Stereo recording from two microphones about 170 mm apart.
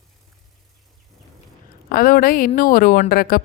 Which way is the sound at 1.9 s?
60° left (ahead or behind).